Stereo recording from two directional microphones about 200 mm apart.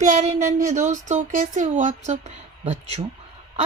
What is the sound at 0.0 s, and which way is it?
A woman's voice, 35° right (ahead or behind).